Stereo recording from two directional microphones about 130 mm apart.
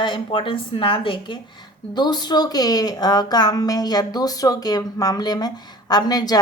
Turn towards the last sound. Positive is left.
turn(degrees=30)  # may be behind; listen again after turning